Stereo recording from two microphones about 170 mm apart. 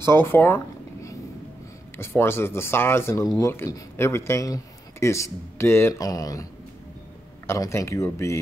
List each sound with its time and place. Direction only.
0.0 s speech: 15° left (ahead or behind)
2.0 s speech: 15° left (ahead or behind)
7.4 s speech: 15° left (ahead or behind)